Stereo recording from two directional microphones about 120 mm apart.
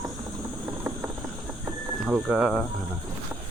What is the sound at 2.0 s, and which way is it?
Speech, 10° right (ahead or behind).